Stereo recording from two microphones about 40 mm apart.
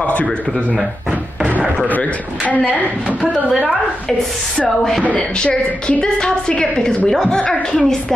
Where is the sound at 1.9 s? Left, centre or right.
Left.